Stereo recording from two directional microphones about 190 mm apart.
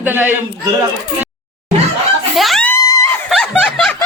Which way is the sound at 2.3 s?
Centre (ahead or behind).